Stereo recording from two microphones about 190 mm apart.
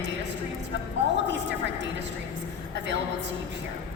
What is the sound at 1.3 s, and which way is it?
Speech, 70° right (ahead or behind).